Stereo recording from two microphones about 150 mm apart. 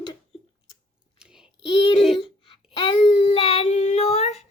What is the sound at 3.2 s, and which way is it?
Child singing, 40° left (ahead or behind).